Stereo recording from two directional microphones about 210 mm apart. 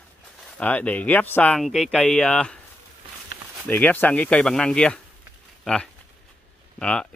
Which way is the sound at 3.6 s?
10° left (ahead or behind).